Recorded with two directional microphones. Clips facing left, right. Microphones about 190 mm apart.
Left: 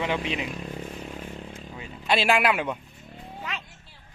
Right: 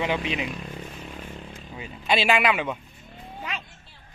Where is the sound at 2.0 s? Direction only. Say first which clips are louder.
Even; centre (ahead or behind).